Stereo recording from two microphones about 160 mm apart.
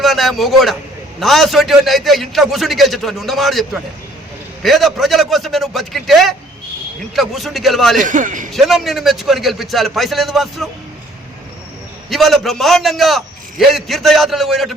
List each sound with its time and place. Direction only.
0.0 s a man's voice: centre (ahead or behind)
7.9 s a man's voice: 55° right (ahead or behind)
8.5 s a man's voice: centre (ahead or behind)
12.0 s a man's voice: centre (ahead or behind)